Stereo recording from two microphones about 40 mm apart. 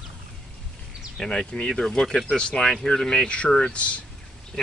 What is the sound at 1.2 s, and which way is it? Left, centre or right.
Speech, left.